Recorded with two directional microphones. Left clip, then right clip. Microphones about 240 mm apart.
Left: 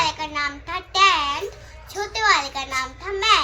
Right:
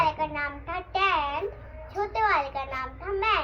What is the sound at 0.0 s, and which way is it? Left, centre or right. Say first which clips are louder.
Child singing: left 3 dB; centre.